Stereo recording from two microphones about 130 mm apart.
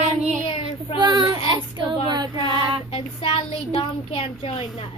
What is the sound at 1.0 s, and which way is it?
Speech, 35° right (ahead or behind).